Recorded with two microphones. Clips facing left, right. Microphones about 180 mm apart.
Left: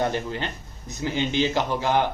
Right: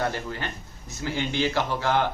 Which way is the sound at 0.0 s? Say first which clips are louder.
Left 3 dB; 20° left (ahead or behind).